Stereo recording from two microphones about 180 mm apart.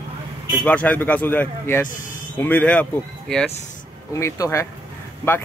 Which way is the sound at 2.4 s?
10° left (ahead or behind).